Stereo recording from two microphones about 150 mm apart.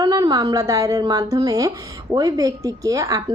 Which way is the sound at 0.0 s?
25° right (ahead or behind).